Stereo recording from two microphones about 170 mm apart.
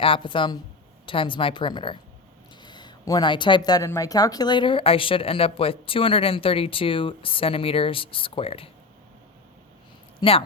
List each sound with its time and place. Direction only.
0.0 s speech: 30° left (ahead or behind)
10.2 s a woman's voice: 35° left (ahead or behind)